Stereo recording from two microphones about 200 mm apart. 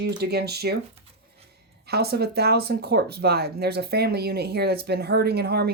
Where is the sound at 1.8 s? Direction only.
50° right (ahead or behind).